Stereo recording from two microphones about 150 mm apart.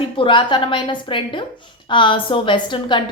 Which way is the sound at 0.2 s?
35° left (ahead or behind).